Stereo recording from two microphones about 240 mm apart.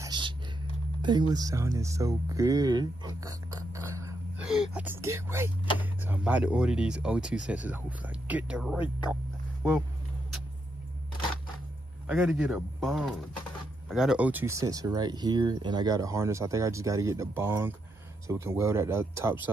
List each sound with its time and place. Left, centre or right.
0.0 s a sound: centre
1.0 s speech: centre
12.1 s speech: centre